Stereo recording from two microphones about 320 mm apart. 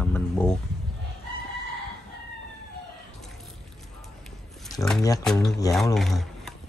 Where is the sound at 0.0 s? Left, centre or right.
Centre.